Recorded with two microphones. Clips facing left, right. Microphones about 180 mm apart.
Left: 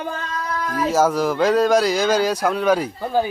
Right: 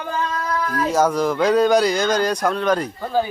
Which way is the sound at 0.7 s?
5° left (ahead or behind).